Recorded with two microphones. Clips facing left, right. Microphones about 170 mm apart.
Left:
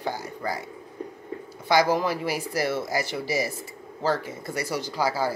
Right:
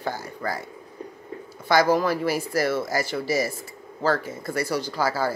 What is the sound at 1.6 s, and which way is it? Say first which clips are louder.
Speech: right 2 dB; 20° left (ahead or behind).